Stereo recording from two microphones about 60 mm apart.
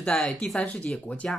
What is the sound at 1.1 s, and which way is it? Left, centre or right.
Speech, left.